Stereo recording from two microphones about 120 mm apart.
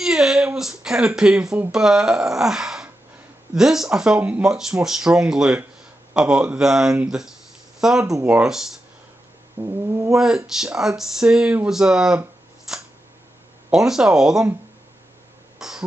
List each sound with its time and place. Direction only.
0.0 s a sound: 5° right (ahead or behind)
0.6 s speech: 5° right (ahead or behind)
8.0 s cat: 25° right (ahead or behind)
8.3 s speech: 5° right (ahead or behind)
9.6 s cat: 25° right (ahead or behind)
10.1 s speech: 5° right (ahead or behind)
15.6 s cough: 5° right (ahead or behind)